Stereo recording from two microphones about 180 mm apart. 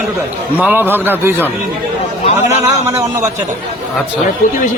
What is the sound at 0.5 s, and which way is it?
Speech, 10° right (ahead or behind).